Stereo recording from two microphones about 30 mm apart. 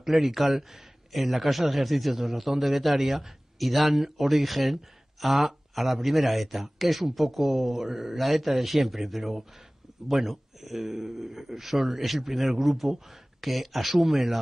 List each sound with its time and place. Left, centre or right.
0.0 s a man's voice: centre